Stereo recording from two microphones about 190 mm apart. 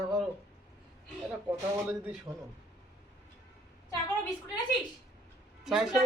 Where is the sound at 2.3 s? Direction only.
15° right (ahead or behind).